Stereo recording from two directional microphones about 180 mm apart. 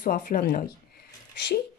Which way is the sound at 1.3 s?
70° left (ahead or behind).